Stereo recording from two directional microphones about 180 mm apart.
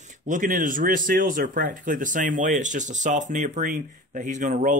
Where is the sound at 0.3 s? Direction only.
50° right (ahead or behind).